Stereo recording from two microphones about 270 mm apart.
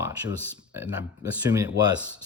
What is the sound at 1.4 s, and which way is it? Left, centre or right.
Speech, centre.